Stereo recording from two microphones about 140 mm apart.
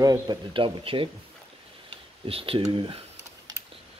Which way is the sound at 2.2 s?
40° right (ahead or behind).